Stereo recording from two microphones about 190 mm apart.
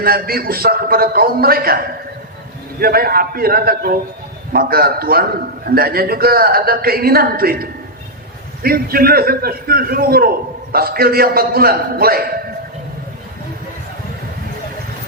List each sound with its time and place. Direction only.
0.0 s a man's voice: 50° right (ahead or behind)
2.8 s a man's voice: 55° right (ahead or behind)